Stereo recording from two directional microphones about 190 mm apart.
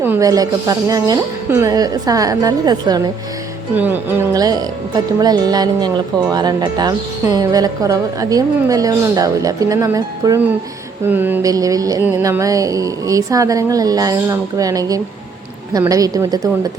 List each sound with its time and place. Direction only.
0.0 s speech: 15° right (ahead or behind)
3.8 s speech: 10° right (ahead or behind)
11.1 s music: 10° right (ahead or behind)
15.7 s speech: 20° right (ahead or behind)